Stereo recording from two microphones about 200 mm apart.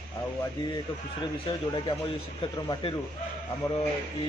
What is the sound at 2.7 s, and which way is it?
Speech, 25° left (ahead or behind).